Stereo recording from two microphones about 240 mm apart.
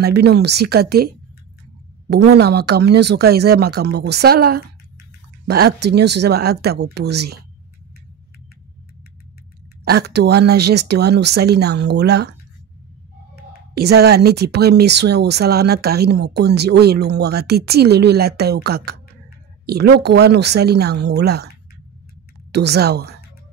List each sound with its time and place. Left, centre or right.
0.0 s speech: right
9.8 s speech: right
13.7 s speech: right
22.5 s a woman's voice: right